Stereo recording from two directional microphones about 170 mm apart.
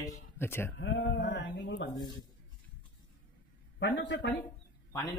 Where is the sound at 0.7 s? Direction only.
90° left.